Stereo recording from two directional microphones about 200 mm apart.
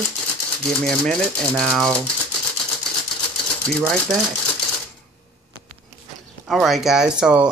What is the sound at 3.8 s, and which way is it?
Speech, centre (ahead or behind).